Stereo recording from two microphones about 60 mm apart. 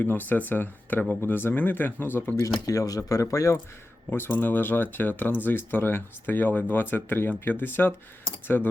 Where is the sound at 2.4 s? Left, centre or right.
Left.